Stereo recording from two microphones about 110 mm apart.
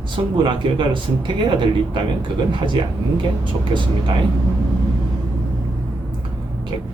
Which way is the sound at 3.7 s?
50° right (ahead or behind).